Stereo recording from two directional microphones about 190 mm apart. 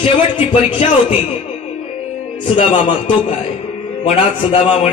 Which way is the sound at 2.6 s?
40° left (ahead or behind).